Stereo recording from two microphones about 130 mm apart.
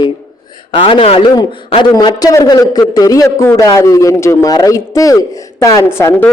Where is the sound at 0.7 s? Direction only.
40° left (ahead or behind).